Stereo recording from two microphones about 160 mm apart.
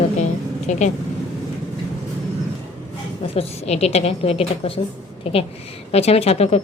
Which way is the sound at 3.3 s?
40° left (ahead or behind).